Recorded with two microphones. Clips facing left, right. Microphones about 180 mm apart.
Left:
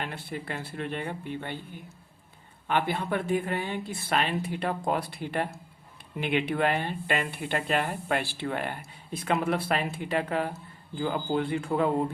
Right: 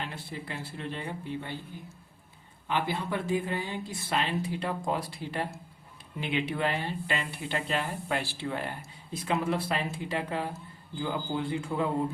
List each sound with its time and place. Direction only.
0.0 s speech: 60° left (ahead or behind)
2.6 s speech: 60° left (ahead or behind)